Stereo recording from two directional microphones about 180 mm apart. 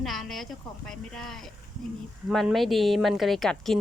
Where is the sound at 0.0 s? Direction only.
Centre (ahead or behind).